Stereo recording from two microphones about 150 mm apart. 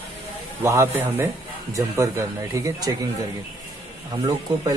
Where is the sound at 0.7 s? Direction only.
15° right (ahead or behind).